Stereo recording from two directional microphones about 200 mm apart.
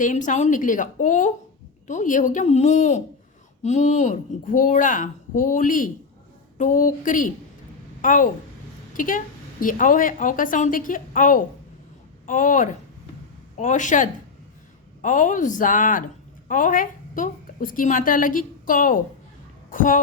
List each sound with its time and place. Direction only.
0.0 s a woman's voice: 40° left (ahead or behind)